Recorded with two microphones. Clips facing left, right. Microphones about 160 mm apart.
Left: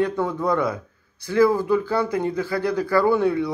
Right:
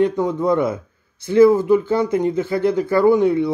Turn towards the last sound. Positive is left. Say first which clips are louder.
# right 5 dB
turn(degrees=-20)  # may be behind; listen again after turning